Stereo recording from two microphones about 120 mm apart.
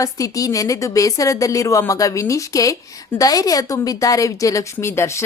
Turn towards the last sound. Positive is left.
turn(degrees=20)  # may be behind; listen again after turning